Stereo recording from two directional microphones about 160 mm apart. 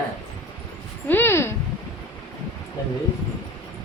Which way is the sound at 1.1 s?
15° left (ahead or behind).